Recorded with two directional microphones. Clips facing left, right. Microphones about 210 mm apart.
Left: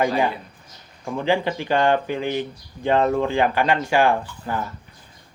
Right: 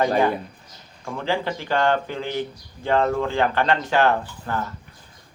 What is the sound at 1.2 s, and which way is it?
Speech, 15° left (ahead or behind).